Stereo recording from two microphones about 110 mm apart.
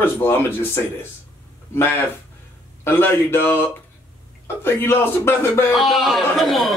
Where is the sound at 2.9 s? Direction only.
20° left (ahead or behind).